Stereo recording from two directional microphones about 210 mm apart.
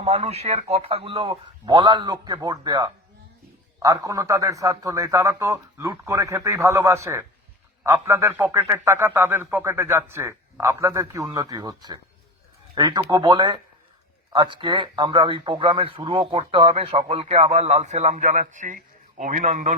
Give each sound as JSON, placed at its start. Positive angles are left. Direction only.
{"t": 0.0, "sound": "a man's voice", "side_deg": -30}